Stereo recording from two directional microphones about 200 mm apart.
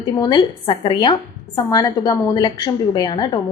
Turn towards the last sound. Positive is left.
turn(degrees=20)  # may be behind; listen again after turning